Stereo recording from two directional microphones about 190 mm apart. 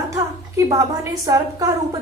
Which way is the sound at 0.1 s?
15° right (ahead or behind).